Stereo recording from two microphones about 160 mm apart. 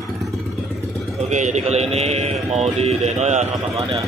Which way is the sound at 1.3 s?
50° right (ahead or behind).